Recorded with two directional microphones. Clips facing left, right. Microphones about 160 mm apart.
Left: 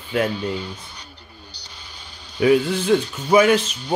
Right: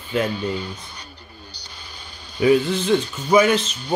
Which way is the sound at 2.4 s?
10° left (ahead or behind).